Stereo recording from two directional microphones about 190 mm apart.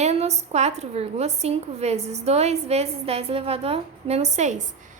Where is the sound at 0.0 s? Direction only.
35° right (ahead or behind).